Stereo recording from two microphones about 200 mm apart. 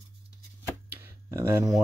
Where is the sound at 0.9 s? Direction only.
10° right (ahead or behind).